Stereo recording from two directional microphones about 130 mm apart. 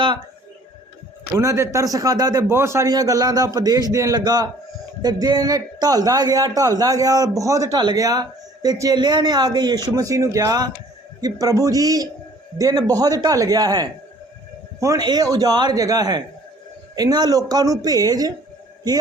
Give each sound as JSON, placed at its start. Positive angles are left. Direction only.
{"t": 1.4, "sound": "a man's voice", "side_deg": -25}